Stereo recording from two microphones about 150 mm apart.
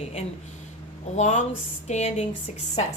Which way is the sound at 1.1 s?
55° left (ahead or behind).